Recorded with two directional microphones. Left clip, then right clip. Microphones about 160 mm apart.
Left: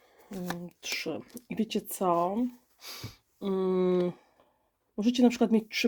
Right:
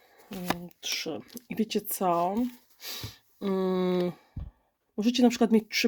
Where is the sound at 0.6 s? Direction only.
10° right (ahead or behind).